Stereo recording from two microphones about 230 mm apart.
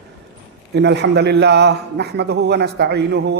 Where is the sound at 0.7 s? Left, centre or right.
Right.